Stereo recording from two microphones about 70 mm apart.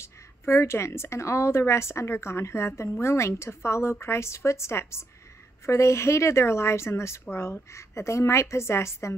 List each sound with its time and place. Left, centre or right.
0.0 s a woman's voice: left